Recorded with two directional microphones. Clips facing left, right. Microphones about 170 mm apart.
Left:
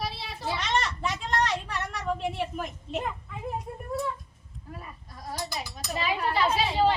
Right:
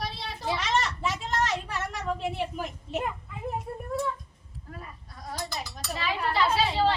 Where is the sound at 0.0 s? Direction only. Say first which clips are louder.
Even; centre (ahead or behind).